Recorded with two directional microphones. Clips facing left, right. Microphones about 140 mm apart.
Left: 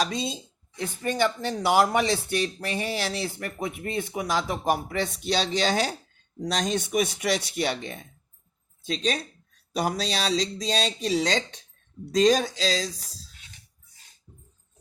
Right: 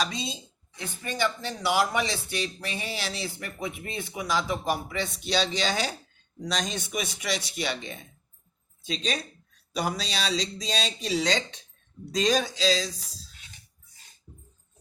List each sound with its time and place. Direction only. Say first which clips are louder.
0.0 s speech: left 3 dB; 50° left (ahead or behind)